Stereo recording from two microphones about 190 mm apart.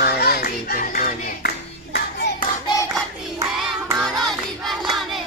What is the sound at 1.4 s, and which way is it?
Clapping, 55° left (ahead or behind).